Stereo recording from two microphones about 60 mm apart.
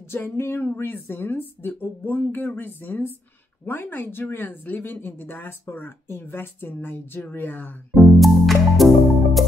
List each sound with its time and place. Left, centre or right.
0.1 s speech: left
7.9 s music: centre